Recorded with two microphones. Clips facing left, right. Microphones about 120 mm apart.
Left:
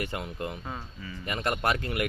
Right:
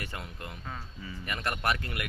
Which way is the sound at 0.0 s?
20° left (ahead or behind).